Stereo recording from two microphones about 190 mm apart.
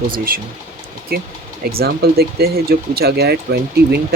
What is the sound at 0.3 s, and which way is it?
Speech, 50° right (ahead or behind).